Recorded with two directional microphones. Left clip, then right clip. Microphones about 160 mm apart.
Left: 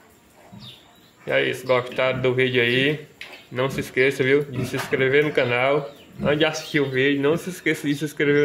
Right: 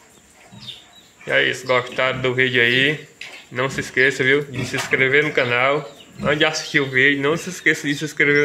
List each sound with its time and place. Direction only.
1.2 s speech: 10° left (ahead or behind)